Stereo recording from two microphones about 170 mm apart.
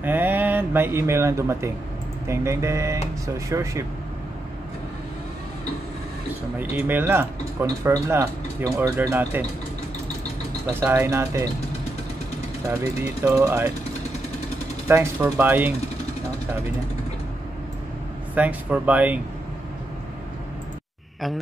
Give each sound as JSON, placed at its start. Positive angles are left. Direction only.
{"t": 0.0, "sound": "speech", "side_deg": -10}
{"t": 6.6, "sound": "speech", "side_deg": -10}
{"t": 10.7, "sound": "speech", "side_deg": -15}
{"t": 12.6, "sound": "speech", "side_deg": -15}
{"t": 14.9, "sound": "speech", "side_deg": -15}
{"t": 18.3, "sound": "speech", "side_deg": -10}